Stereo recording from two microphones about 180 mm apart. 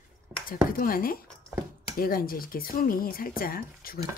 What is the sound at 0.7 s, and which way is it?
Speech, 55° left (ahead or behind).